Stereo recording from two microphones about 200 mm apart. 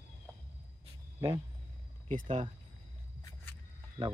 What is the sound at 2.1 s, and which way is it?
Speech, 35° right (ahead or behind).